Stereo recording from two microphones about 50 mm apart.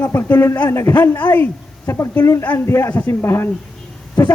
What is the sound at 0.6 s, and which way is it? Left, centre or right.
Speech, left.